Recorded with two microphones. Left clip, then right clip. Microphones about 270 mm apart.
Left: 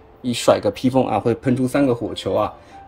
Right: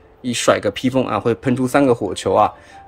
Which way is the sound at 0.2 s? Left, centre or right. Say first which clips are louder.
Even; centre.